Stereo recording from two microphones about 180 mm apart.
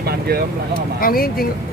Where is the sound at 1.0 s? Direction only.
55° left (ahead or behind).